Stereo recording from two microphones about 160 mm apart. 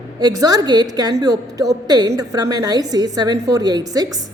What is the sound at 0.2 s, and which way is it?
A woman's voice, 25° right (ahead or behind).